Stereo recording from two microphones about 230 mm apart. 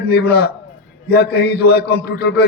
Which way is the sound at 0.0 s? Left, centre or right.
Left.